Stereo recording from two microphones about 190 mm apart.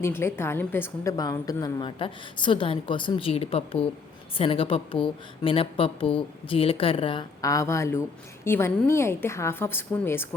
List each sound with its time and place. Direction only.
0.0 s a woman's voice: 15° left (ahead or behind)